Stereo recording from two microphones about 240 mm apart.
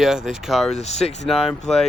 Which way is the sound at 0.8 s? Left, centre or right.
Left.